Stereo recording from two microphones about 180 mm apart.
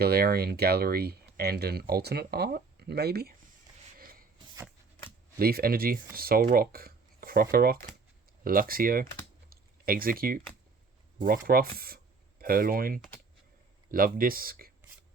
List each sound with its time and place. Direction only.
0.0 s speech: 60° right (ahead or behind)
3.9 s a sound: 55° right (ahead or behind)
5.4 s speech: 55° right (ahead or behind)
9.5 s typing: 55° right (ahead or behind)
11.3 s speech: 55° right (ahead or behind)